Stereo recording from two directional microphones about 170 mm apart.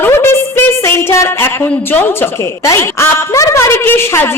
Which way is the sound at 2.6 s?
20° left (ahead or behind).